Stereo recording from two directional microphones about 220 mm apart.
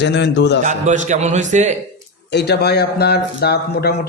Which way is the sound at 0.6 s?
35° right (ahead or behind).